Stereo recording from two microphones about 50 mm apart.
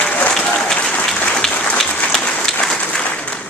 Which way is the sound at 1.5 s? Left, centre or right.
Left.